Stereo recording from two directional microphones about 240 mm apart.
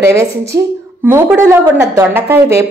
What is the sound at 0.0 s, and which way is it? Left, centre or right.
A woman's voice, centre.